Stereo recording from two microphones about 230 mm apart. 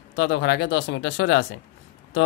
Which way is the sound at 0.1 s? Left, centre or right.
Left.